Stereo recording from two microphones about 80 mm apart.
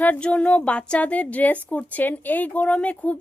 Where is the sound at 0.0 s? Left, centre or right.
Centre.